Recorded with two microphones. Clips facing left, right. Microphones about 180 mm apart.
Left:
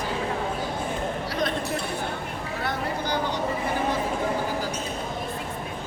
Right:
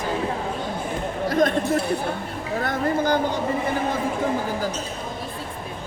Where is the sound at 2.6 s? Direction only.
50° right (ahead or behind).